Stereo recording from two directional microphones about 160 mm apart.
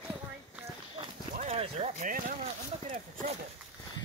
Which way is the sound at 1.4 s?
40° right (ahead or behind).